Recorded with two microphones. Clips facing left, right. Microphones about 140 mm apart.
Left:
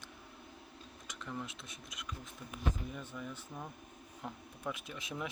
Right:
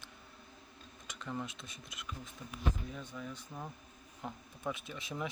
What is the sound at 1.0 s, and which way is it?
Speech, centre (ahead or behind).